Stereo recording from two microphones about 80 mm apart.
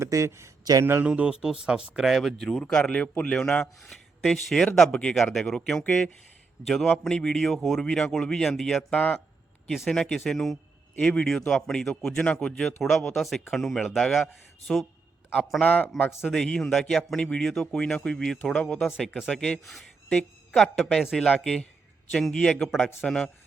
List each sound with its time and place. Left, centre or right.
0.0 s speech: right
0.6 s speech: right
1.0 s speech: centre
2.5 s speech: centre
9.0 s speech: centre
9.6 s speech: centre
15.4 s speech: centre
15.6 s speech: centre
16.3 s speech: centre
19.3 s speech: centre